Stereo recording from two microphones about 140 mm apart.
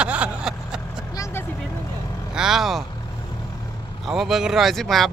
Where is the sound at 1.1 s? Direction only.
20° left (ahead or behind).